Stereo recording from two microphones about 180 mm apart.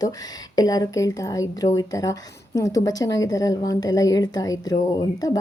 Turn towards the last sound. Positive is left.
turn(degrees=20)  # may be behind; listen again after turning